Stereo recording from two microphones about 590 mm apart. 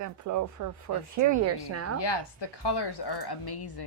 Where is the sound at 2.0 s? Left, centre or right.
Left.